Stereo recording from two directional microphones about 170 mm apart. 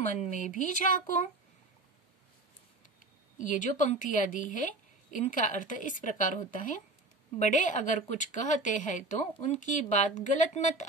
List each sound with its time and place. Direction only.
0.0 s a woman's voice: 45° left (ahead or behind)
3.3 s a woman's voice: 50° left (ahead or behind)